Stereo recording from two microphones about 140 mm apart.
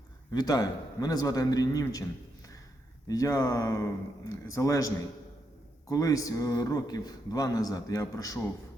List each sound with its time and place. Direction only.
0.3 s speech: 30° left (ahead or behind)
3.1 s speech: 25° left (ahead or behind)
5.9 s speech: 25° left (ahead or behind)